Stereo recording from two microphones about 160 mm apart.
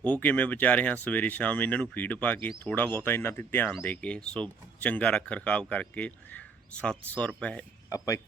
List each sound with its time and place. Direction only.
0.0 s a man's voice: 10° left (ahead or behind)
7.9 s speech: 20° left (ahead or behind)